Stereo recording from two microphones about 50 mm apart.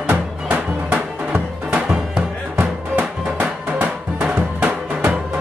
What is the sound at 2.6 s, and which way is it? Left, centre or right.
Music, right.